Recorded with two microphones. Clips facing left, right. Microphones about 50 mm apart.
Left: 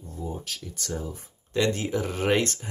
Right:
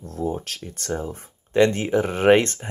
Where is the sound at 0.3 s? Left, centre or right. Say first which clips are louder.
Right 6 dB; right.